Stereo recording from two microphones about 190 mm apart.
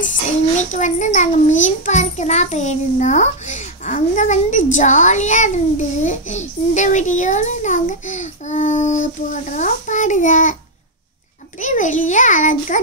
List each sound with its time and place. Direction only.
0.6 s a child's voice: 40° left (ahead or behind)
11.6 s a child's voice: 40° left (ahead or behind)